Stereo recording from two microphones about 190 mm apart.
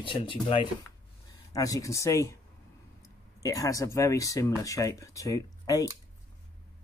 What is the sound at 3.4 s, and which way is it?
Speech, 15° left (ahead or behind).